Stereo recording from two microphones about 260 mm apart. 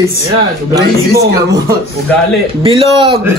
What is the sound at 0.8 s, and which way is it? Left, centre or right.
Speech, right.